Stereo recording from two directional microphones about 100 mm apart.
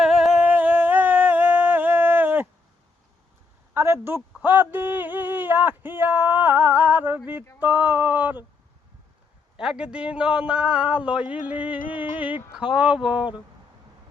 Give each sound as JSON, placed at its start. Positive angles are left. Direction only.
{"t": 0.0, "sound": "humming", "side_deg": -5}
{"t": 0.4, "sound": "music", "side_deg": -15}
{"t": 3.8, "sound": "a sound", "side_deg": -25}
{"t": 7.6, "sound": "a man's voice", "side_deg": -20}
{"t": 9.6, "sound": "a man's voice", "side_deg": -10}